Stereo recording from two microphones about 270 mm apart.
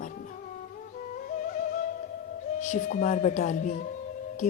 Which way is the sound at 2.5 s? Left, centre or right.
Left.